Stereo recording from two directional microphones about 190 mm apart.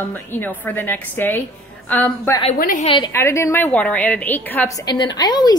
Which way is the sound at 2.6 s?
45° left (ahead or behind).